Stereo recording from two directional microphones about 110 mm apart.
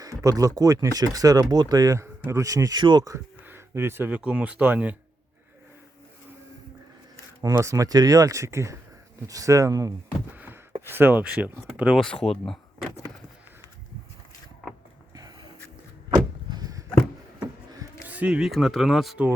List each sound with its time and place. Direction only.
0.0 s speech: 30° right (ahead or behind)
3.4 s speech: 20° right (ahead or behind)
7.4 s speech: 30° right (ahead or behind)
10.3 s a sound: 15° right (ahead or behind)
10.8 s speech: 20° right (ahead or behind)
12.2 s speech: 5° left (ahead or behind)
16.0 s vehicle: 40° right (ahead or behind)
18.1 s speech: 10° right (ahead or behind)